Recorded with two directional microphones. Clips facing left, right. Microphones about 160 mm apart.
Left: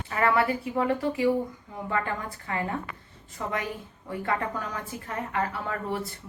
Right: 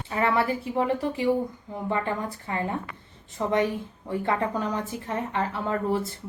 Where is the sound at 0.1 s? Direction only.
20° right (ahead or behind).